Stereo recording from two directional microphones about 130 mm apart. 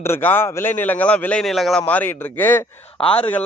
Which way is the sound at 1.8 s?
15° left (ahead or behind).